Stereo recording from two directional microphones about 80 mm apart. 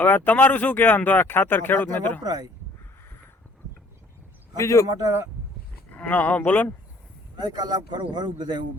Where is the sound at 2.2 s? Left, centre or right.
Right.